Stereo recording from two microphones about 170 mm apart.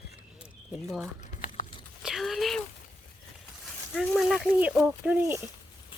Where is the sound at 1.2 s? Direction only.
50° left (ahead or behind).